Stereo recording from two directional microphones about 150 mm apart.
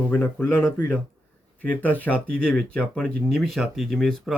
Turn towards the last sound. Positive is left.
turn(degrees=0)  # may be behind; listen again after turning